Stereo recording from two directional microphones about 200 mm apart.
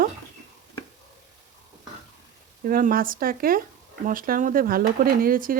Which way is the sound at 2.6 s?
45° right (ahead or behind).